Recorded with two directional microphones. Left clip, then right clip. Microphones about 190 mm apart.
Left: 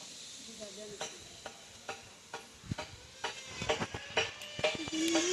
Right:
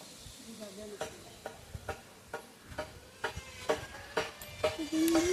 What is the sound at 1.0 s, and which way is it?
Stir, 50° right (ahead or behind).